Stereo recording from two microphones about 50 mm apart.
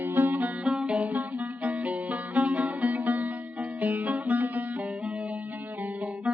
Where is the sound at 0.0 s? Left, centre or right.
Right.